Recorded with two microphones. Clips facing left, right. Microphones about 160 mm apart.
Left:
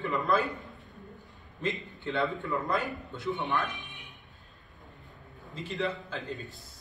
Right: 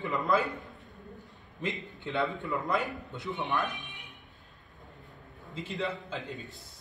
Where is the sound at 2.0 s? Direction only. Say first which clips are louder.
Left 1 dB; 20° right (ahead or behind).